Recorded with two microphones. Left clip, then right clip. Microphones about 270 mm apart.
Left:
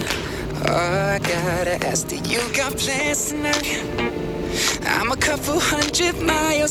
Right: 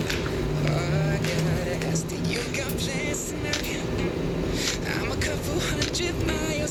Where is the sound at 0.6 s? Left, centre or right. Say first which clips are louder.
Left 12 dB; centre.